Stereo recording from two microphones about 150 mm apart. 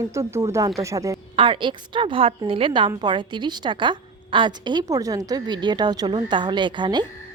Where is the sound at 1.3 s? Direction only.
35° right (ahead or behind).